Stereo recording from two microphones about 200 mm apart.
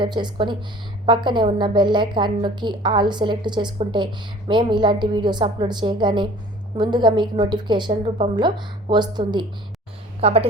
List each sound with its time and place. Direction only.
0.0 s a woman's voice: 25° right (ahead or behind)